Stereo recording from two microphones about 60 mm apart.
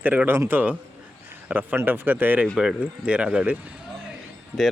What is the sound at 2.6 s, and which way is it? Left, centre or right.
Speech, centre.